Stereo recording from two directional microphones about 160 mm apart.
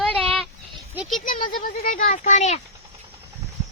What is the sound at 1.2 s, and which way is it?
A child's voice, 60° left (ahead or behind).